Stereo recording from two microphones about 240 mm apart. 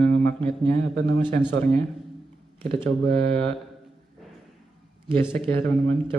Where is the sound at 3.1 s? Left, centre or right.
Centre.